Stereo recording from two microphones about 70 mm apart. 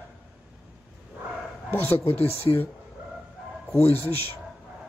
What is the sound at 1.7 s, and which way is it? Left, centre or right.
Speech, left.